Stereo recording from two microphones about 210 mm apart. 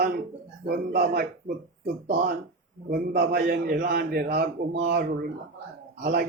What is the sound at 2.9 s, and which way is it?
Speech, 45° right (ahead or behind).